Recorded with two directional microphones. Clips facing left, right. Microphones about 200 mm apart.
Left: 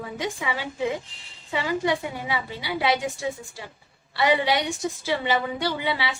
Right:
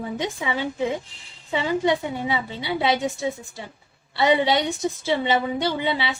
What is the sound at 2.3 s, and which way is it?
A woman's voice, 25° right (ahead or behind).